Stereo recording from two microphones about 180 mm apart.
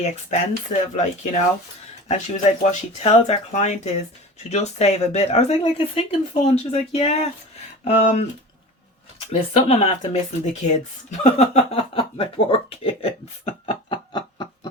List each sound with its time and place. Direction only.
0.0 s speech: 40° left (ahead or behind)
9.3 s speech: 30° left (ahead or behind)